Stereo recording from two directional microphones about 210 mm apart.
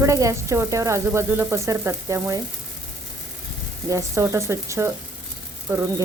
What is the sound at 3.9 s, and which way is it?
Speech, 15° right (ahead or behind).